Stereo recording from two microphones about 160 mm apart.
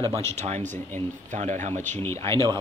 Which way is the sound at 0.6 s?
15° left (ahead or behind).